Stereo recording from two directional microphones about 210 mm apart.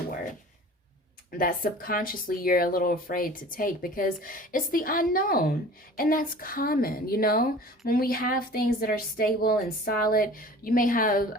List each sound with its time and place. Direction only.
1.4 s speech: 45° left (ahead or behind)